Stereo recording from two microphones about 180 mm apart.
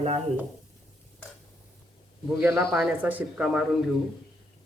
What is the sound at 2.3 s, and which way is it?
Speech, 5° right (ahead or behind).